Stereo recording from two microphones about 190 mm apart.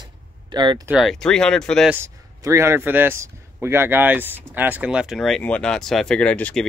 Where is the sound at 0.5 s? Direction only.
25° right (ahead or behind).